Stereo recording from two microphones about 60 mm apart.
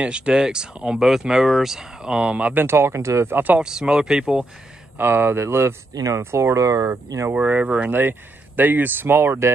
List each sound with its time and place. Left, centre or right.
0.0 s speech: centre
2.6 s speech: right
3.3 s speech: right
3.5 s speech: centre
4.9 s speech: right
7.4 s speech: right
7.9 s speech: right